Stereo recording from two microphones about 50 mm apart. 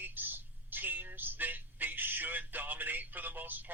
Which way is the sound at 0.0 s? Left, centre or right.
Right.